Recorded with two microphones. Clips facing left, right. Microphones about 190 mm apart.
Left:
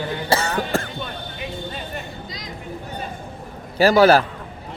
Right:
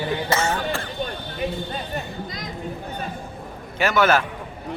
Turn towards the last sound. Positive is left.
turn(degrees=35)  # may be behind; listen again after turning